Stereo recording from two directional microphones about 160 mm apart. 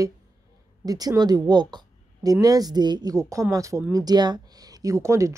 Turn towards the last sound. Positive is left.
turn(degrees=-20)  # may be behind; listen again after turning